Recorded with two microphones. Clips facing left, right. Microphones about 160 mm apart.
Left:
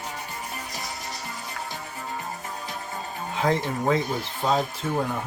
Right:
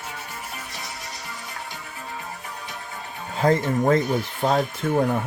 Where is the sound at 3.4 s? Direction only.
50° right (ahead or behind).